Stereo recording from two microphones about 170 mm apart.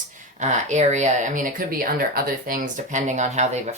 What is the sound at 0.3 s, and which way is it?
Speech, 45° right (ahead or behind).